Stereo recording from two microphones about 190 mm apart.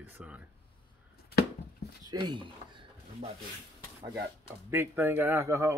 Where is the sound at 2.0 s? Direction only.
25° right (ahead or behind).